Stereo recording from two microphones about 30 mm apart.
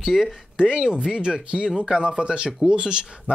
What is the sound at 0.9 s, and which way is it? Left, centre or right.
Speech, right.